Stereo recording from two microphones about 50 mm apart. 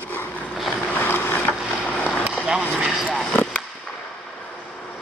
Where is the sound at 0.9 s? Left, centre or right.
Left.